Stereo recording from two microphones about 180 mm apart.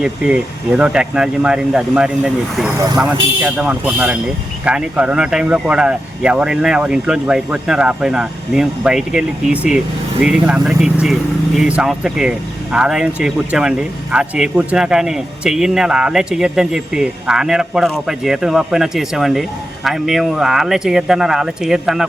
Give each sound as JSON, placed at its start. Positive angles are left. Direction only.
{"t": 0.0, "sound": "speech", "side_deg": -5}
{"t": 2.7, "sound": "speech", "side_deg": -20}
{"t": 3.0, "sound": "speech", "side_deg": -5}